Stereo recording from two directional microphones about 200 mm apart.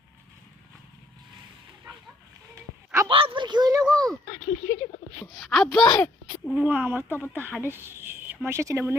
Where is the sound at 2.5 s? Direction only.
15° right (ahead or behind).